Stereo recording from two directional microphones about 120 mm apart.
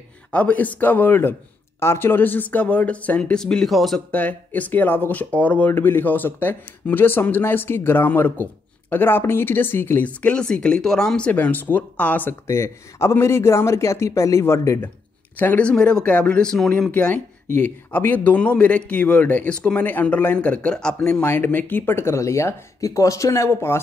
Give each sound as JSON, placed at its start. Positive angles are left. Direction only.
{"t": 0.3, "sound": "speech", "side_deg": 10}
{"t": 4.1, "sound": "speech", "side_deg": 10}